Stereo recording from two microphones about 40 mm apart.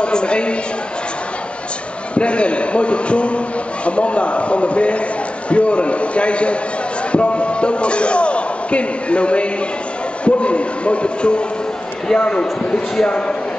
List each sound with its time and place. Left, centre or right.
0.0 s a man's voice: left
2.1 s a man's voice: left